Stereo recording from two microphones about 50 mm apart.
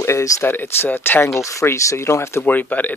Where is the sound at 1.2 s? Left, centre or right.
Left.